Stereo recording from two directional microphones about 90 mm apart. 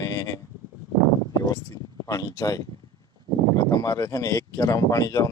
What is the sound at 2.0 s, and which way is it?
Speech, 40° left (ahead or behind).